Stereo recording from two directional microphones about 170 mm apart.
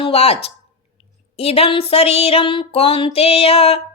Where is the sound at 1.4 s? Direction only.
35° left (ahead or behind).